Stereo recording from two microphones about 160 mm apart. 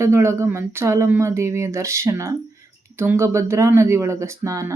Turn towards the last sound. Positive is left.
turn(degrees=-20)  # may be behind; listen again after turning